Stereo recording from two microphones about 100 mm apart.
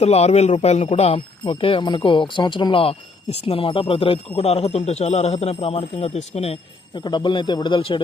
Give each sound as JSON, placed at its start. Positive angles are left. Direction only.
{"t": 0.0, "sound": "speech", "side_deg": 90}
{"t": 6.9, "sound": "a man's voice", "side_deg": 50}